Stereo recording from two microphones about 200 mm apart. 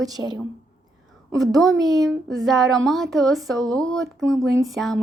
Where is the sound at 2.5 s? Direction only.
Centre (ahead or behind).